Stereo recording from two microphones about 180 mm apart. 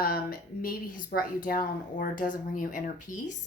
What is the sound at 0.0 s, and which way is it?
Speech, 55° left (ahead or behind).